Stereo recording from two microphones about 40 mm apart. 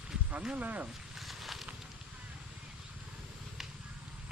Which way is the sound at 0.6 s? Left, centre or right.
Right.